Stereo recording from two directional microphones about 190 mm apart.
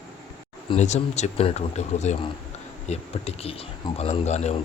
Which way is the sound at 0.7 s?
35° left (ahead or behind).